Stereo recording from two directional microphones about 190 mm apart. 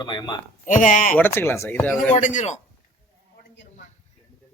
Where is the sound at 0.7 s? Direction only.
45° left (ahead or behind).